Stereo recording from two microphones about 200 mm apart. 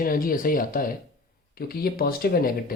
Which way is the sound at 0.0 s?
45° left (ahead or behind).